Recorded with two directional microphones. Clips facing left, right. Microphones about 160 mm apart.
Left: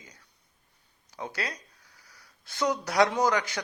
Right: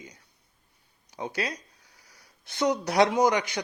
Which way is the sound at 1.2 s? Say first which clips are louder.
Right 4 dB; 20° right (ahead or behind).